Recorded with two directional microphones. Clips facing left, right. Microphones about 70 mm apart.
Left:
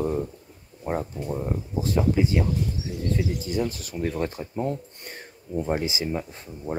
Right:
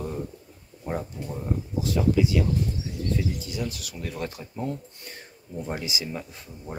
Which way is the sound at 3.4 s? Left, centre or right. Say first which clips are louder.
Left 5 dB; left.